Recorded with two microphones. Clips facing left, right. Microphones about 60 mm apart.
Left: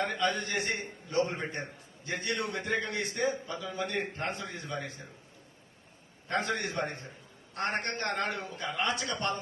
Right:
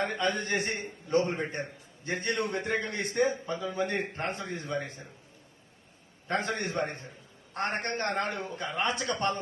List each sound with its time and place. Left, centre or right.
0.2 s a man's voice: right
6.2 s a man's voice: right
9.0 s speech: right